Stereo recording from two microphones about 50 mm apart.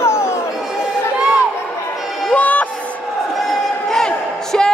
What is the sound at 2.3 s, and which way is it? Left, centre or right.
Music, left.